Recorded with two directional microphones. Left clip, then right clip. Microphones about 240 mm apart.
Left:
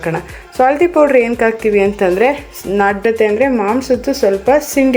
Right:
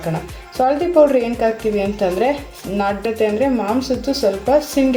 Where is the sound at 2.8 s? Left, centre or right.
Left.